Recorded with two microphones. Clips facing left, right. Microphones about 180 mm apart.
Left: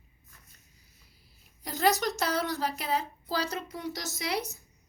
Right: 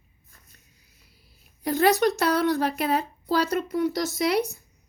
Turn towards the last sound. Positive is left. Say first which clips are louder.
# right 9 dB
turn(degrees=-60)  # may be behind; listen again after turning